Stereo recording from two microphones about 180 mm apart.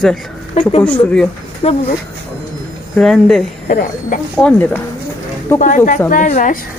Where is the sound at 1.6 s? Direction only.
35° left (ahead or behind).